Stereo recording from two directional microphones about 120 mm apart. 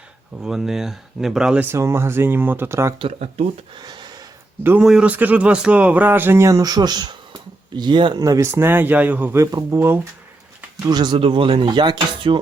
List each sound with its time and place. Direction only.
0.4 s speech: 5° right (ahead or behind)
1.7 s speech: 20° right (ahead or behind)
4.8 s speech: 5° right (ahead or behind); by 8.2 s 40° right (ahead or behind)
8.2 s speech: 25° right (ahead or behind)
9.4 s speech: 30° right (ahead or behind)
10.8 s speech: 35° right (ahead or behind)